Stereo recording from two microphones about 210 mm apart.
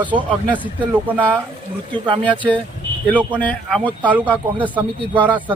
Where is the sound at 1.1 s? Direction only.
5° left (ahead or behind).